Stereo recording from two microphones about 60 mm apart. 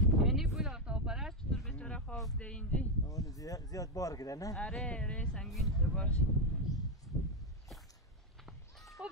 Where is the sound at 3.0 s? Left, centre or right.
Left.